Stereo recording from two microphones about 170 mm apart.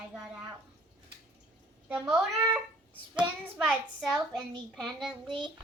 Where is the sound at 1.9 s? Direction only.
5° right (ahead or behind).